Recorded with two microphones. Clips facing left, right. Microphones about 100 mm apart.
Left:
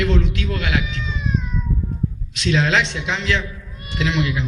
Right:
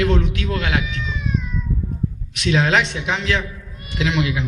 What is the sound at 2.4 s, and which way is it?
A man's voice, 45° right (ahead or behind).